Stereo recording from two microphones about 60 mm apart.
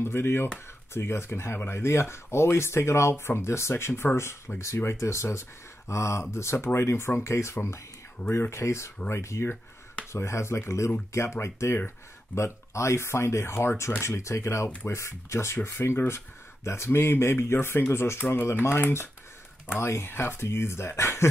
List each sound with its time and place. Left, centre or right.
0.0 s speech: left